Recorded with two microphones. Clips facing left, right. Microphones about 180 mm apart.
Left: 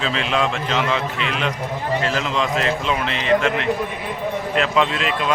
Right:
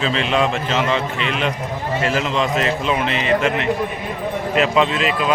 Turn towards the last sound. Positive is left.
turn(degrees=-5)  # may be behind; listen again after turning